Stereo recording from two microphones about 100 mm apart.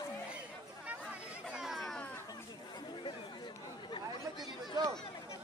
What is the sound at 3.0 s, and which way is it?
Chatter, 50° left (ahead or behind).